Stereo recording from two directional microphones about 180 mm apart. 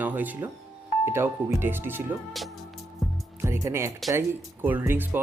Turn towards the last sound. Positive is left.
turn(degrees=-10)  # may be behind; listen again after turning